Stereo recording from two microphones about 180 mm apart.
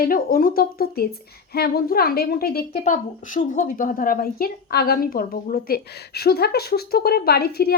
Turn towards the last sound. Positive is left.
turn(degrees=60)  # may be behind; listen again after turning